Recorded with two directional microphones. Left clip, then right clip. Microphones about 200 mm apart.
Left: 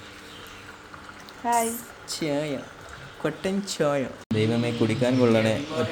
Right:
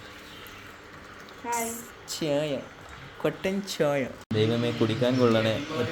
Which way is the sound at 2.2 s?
5° left (ahead or behind).